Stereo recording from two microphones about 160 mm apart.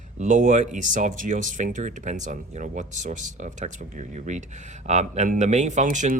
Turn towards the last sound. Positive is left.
turn(degrees=-55)  # may be behind; listen again after turning